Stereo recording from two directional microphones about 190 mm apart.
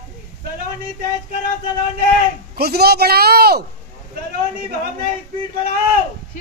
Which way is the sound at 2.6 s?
55° right (ahead or behind).